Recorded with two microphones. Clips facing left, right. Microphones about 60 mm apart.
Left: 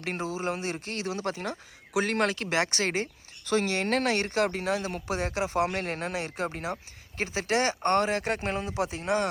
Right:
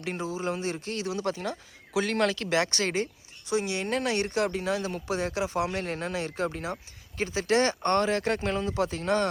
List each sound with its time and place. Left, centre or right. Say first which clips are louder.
0.0 s speech: even; left
3.5 s speech: left 2 dB; left